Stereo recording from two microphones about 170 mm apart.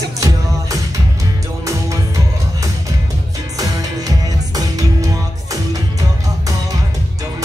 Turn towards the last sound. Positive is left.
turn(degrees=-20)  # may be behind; listen again after turning